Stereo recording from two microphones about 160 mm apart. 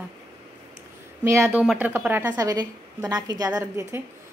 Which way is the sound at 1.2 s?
15° right (ahead or behind).